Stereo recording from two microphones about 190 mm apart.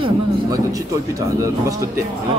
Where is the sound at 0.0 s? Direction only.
20° right (ahead or behind).